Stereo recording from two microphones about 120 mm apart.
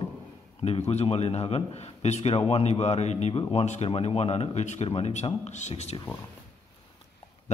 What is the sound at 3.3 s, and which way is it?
A man's voice, 50° left (ahead or behind).